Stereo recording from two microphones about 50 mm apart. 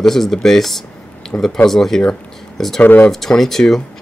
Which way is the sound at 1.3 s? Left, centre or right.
Left.